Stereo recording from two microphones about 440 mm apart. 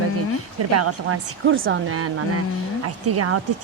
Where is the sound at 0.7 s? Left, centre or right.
Right.